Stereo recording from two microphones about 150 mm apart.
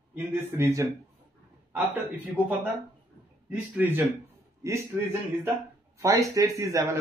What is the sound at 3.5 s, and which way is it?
A man's voice, 10° right (ahead or behind).